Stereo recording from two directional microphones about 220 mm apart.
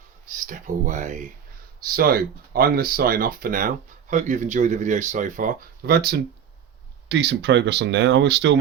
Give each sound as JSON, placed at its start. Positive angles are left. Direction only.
{"t": 0.3, "sound": "speech", "side_deg": -35}